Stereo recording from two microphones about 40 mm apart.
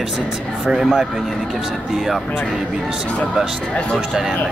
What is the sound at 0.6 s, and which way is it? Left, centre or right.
Speech, centre.